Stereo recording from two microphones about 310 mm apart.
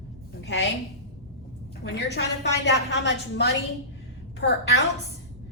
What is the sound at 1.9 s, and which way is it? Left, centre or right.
A woman's voice, left.